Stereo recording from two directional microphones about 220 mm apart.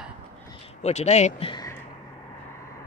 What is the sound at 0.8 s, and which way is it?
Speech, 30° left (ahead or behind).